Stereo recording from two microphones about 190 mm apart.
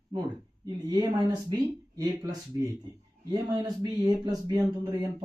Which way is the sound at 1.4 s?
20° right (ahead or behind).